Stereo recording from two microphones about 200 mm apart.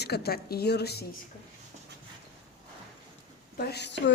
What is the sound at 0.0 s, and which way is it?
A woman's voice, 55° left (ahead or behind).